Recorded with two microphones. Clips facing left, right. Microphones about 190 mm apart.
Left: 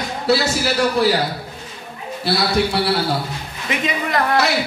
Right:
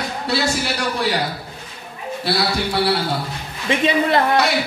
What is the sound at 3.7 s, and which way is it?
Speech, 30° right (ahead or behind).